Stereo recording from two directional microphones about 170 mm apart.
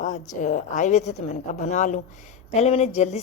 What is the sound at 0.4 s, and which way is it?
A woman's voice, 45° left (ahead or behind).